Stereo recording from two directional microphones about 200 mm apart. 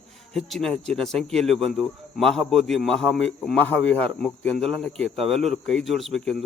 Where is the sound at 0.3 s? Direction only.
Centre (ahead or behind).